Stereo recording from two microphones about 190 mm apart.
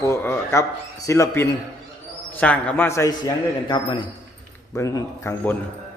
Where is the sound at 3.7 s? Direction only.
25° left (ahead or behind).